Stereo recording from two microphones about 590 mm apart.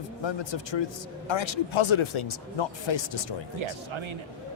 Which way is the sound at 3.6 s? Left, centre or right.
Right.